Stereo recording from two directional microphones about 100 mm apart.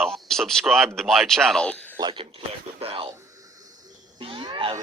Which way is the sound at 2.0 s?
45° right (ahead or behind).